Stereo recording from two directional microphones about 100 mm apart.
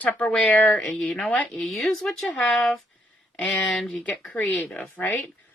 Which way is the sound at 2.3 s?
15° left (ahead or behind).